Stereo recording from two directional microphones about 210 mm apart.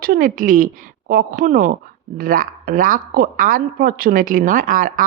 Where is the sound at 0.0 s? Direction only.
40° right (ahead or behind).